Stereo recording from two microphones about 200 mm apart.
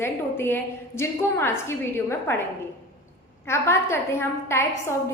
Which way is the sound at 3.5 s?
15° left (ahead or behind).